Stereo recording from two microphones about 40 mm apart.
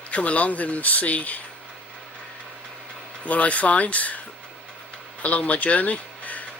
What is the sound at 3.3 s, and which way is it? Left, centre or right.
Speech, left.